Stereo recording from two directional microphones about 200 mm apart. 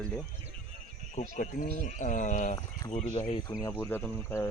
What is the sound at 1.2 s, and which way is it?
Speech, 40° left (ahead or behind).